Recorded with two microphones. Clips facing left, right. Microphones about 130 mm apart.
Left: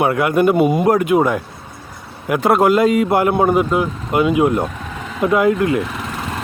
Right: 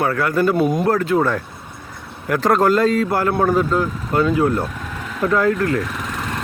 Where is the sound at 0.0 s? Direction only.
20° left (ahead or behind).